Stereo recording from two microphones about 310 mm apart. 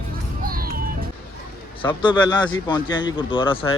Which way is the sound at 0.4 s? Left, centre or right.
Right.